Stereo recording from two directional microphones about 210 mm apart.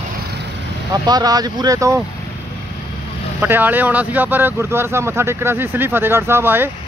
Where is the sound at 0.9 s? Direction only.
20° right (ahead or behind).